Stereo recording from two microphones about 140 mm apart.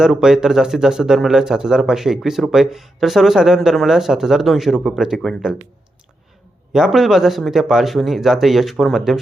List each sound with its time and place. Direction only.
0.0 s speech: 5° right (ahead or behind)
6.7 s speech: 5° right (ahead or behind)